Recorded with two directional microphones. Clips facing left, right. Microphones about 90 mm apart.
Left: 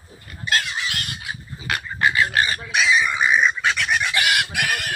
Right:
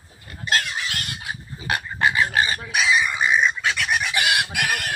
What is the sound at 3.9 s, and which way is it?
Chicken, 20° right (ahead or behind).